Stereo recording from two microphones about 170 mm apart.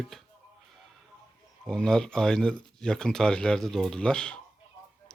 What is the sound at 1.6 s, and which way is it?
Speech, 5° left (ahead or behind).